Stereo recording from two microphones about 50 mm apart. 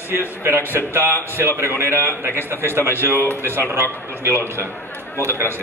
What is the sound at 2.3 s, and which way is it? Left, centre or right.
Speech, right.